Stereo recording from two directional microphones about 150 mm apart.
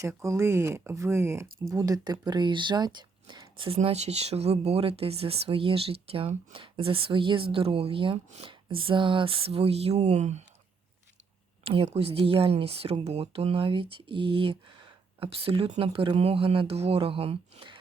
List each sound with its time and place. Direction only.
0.0 s speech: 20° right (ahead or behind)
3.7 s speech: 45° right (ahead or behind)
11.6 s speech: 40° right (ahead or behind)